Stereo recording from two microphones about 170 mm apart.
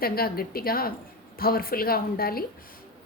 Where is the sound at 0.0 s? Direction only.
60° left (ahead or behind).